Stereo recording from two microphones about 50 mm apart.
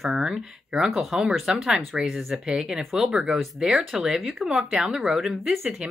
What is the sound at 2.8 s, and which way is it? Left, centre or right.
Speech, centre.